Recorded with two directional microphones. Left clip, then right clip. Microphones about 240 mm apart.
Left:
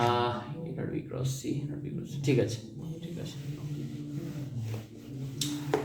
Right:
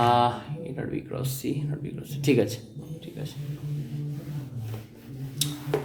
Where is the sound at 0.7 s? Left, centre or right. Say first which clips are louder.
Right 4 dB; right.